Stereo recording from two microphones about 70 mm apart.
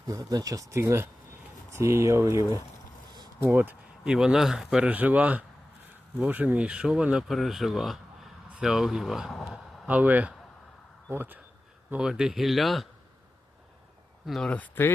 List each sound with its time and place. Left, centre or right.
0.1 s speech: right
0.8 s speech: right
3.4 s speech: right
4.0 s speech: centre
4.7 s speech: centre
9.8 s speech: right
11.9 s speech: centre
14.3 s speech: centre